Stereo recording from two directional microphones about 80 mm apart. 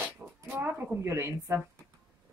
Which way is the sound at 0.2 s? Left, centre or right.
Centre.